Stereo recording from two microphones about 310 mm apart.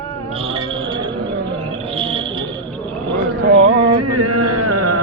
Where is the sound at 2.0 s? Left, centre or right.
Centre.